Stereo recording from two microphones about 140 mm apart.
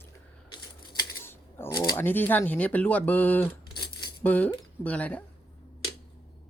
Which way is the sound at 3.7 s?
30° left (ahead or behind).